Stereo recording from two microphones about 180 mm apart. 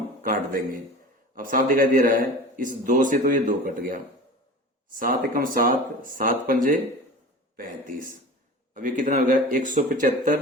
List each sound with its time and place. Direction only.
0.2 s a man's voice: 50° right (ahead or behind)